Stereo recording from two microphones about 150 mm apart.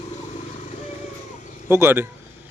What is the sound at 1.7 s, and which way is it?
Speech, 15° right (ahead or behind).